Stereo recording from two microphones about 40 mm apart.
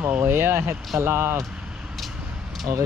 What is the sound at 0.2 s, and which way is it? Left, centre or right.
Speech, right.